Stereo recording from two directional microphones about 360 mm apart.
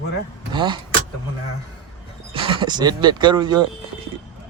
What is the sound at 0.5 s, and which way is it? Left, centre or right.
Speech, centre.